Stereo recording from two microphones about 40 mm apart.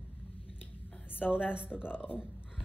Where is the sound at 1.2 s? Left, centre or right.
Left.